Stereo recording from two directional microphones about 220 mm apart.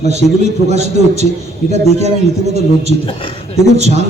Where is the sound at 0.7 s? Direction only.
30° right (ahead or behind).